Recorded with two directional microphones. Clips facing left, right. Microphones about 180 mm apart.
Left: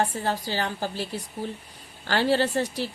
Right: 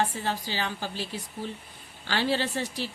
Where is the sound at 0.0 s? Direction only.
45° left (ahead or behind).